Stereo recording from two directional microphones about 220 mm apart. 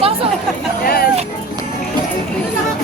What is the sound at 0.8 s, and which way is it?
Speech, 45° left (ahead or behind).